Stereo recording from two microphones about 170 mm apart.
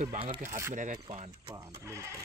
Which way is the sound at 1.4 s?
20° right (ahead or behind).